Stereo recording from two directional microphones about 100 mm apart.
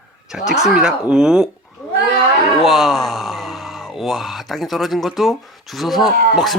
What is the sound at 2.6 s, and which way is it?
Speech, centre (ahead or behind).